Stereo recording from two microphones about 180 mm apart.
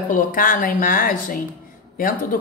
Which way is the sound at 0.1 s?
50° left (ahead or behind).